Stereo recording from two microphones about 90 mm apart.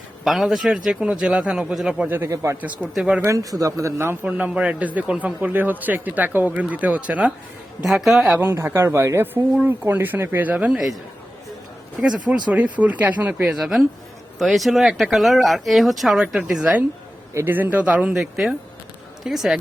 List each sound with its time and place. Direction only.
0.3 s a man's voice: centre (ahead or behind); by 2.3 s 20° right (ahead or behind)
2.3 s speech: 35° right (ahead or behind)
2.9 s a man's voice: 10° right (ahead or behind)
3.2 s speech: 40° right (ahead or behind)
4.3 s a man's voice: 15° right (ahead or behind)
8.0 s speech: 5° right (ahead or behind)
8.4 s speech: 30° right (ahead or behind); by 10.8 s 15° right (ahead or behind)
10.8 s a man's voice: centre (ahead or behind); by 13.5 s 20° right (ahead or behind)
13.5 s a man's voice: 5° right (ahead or behind)
17.3 s speech: 20° right (ahead or behind)
18.1 s speech: 5° right (ahead or behind)